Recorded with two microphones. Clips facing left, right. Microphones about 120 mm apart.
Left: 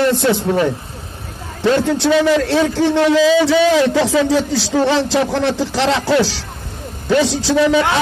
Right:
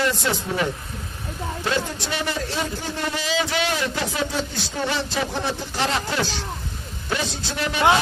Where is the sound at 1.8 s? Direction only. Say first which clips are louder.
Left 14 dB; 80° left.